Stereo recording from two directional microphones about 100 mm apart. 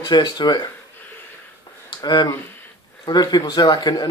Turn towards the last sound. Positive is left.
turn(degrees=40)  # may be behind; listen again after turning